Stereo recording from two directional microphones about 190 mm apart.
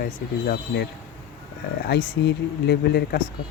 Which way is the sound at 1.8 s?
60° left (ahead or behind).